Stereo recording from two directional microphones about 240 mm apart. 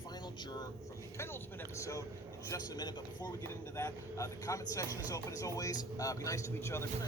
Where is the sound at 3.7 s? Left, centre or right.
Centre.